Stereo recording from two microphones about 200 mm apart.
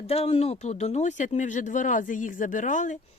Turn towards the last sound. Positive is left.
turn(degrees=40)  # may be behind; listen again after turning